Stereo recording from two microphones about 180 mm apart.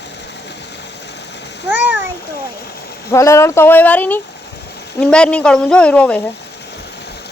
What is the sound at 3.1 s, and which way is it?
A woman's voice, 15° left (ahead or behind).